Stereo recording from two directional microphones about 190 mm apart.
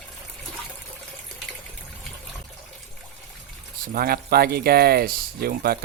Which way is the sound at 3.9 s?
55° right (ahead or behind).